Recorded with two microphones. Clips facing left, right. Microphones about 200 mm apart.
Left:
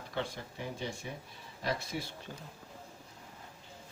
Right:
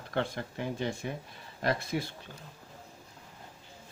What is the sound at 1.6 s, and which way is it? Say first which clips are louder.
Speech: right 5 dB; 55° right (ahead or behind).